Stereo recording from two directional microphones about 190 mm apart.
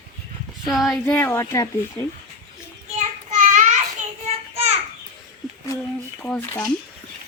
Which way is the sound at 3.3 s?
40° right (ahead or behind).